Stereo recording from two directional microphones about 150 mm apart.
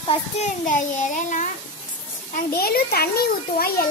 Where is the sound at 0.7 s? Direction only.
55° left (ahead or behind).